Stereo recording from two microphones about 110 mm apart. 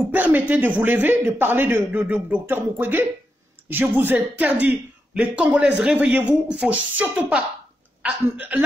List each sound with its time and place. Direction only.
0.1 s speech: 15° right (ahead or behind)